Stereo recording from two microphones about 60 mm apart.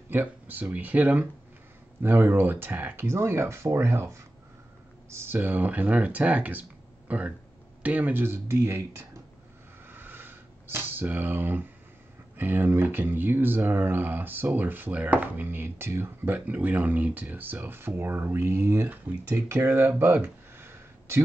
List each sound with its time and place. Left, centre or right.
0.1 s speech: right
3.1 s speech: right
9.8 s sniff: right
12.4 s speech: right
16.3 s speech: right
18.9 s speech: right
19.5 s a sound: right